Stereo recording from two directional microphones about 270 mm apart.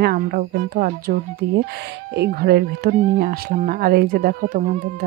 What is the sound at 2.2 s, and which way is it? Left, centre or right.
Speech, right.